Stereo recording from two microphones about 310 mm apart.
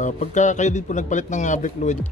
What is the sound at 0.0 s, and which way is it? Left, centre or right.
Speech, left.